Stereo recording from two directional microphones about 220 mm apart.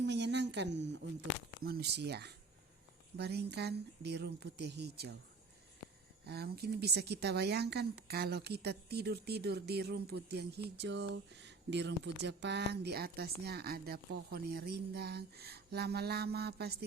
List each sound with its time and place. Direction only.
0.0 s a sound: 50° right (ahead or behind)
1.6 s a woman's voice: 45° right (ahead or behind)
6.2 s a woman's voice: 45° right (ahead or behind)